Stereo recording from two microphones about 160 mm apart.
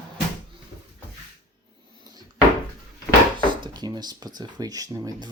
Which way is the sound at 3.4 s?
30° right (ahead or behind).